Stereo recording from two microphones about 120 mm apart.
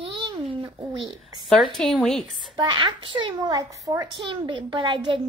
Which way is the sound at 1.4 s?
Centre (ahead or behind).